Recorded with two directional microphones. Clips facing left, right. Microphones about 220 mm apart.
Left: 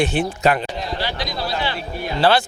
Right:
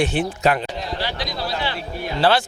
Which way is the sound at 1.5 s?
15° left (ahead or behind).